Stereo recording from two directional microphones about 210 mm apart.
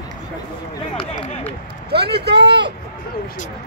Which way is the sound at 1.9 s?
50° right (ahead or behind).